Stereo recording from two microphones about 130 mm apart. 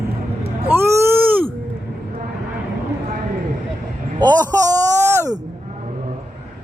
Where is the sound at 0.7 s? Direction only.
20° right (ahead or behind).